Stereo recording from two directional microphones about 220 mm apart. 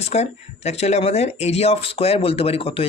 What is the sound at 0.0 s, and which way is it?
Speech, 30° left (ahead or behind).